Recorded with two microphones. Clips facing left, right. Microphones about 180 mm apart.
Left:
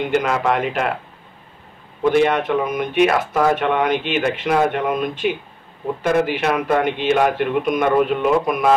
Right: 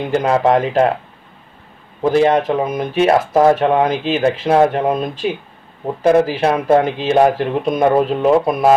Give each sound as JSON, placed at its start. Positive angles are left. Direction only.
{"t": 0.1, "sound": "speech", "side_deg": -35}
{"t": 2.0, "sound": "speech", "side_deg": -35}